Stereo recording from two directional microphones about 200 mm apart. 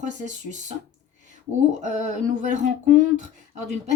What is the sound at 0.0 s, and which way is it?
Speech, 35° right (ahead or behind).